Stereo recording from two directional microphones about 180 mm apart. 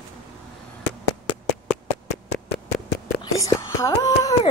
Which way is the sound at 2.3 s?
65° left (ahead or behind).